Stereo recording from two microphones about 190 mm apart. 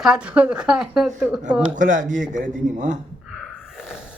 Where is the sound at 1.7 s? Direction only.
45° right (ahead or behind).